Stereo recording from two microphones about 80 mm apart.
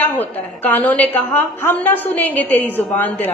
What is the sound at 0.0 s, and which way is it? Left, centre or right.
A woman's voice, left.